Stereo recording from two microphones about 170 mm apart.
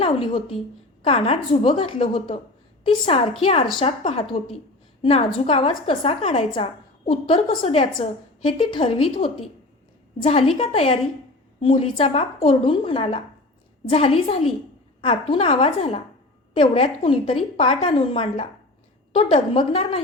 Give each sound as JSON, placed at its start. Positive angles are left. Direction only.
{"t": 0.0, "sound": "a woman's voice", "side_deg": 35}